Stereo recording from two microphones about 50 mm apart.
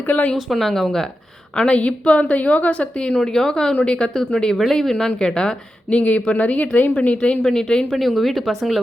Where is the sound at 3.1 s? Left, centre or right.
Centre.